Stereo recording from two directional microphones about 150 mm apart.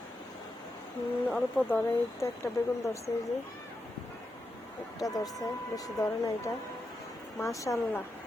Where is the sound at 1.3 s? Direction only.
10° left (ahead or behind).